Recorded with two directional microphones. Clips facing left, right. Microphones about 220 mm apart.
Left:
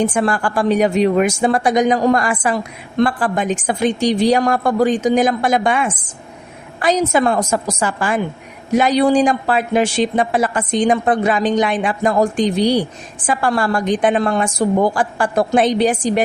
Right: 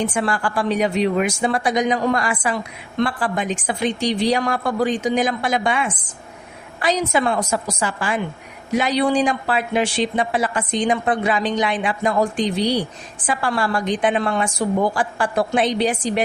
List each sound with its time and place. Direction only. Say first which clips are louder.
0.0 s speech: left 5 dB; 45° left (ahead or behind)